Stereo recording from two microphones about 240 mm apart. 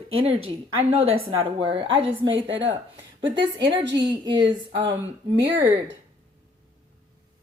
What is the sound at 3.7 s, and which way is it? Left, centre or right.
Speech, right.